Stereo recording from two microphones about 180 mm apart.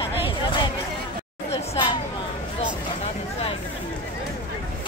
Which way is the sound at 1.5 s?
25° left (ahead or behind).